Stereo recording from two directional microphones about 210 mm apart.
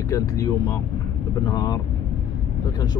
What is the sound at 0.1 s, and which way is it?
Speech, 15° left (ahead or behind).